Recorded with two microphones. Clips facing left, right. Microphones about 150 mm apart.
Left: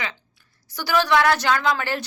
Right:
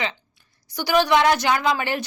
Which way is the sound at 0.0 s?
20° right (ahead or behind).